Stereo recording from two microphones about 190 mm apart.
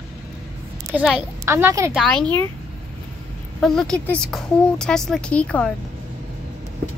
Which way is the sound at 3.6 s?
5° left (ahead or behind).